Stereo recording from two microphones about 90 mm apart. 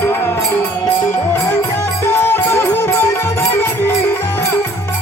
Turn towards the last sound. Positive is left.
turn(degrees=25)  # may be behind; listen again after turning